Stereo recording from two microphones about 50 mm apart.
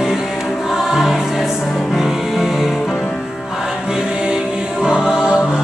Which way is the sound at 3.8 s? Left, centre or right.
Centre.